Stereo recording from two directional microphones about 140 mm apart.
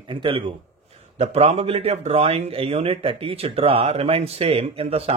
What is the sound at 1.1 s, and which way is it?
Speech, 50° right (ahead or behind).